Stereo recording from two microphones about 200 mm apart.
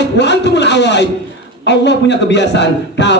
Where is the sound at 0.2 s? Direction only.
60° left (ahead or behind).